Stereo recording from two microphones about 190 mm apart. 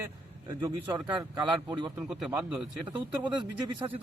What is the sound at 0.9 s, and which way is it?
Speech, 20° right (ahead or behind).